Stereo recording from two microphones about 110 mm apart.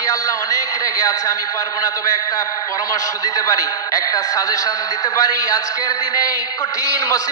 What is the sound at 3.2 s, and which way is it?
A man's voice, 35° left (ahead or behind).